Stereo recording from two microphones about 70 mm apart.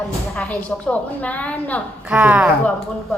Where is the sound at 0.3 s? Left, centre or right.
Centre.